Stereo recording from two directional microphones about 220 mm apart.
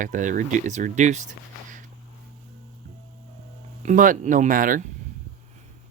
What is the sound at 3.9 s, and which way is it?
Speech, 35° right (ahead or behind).